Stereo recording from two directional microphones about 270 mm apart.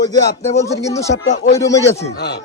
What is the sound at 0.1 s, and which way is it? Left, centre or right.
Speech, centre.